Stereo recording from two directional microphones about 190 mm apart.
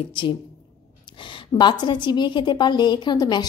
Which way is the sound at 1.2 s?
25° left (ahead or behind).